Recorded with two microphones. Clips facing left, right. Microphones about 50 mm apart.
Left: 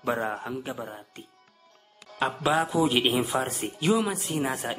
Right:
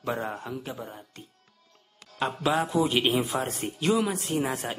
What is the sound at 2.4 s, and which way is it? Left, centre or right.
Speech, centre.